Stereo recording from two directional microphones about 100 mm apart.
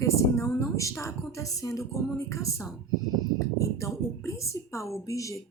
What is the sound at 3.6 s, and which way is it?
Speech, 30° left (ahead or behind).